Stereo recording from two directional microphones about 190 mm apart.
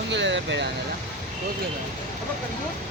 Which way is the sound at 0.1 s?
70° right (ahead or behind).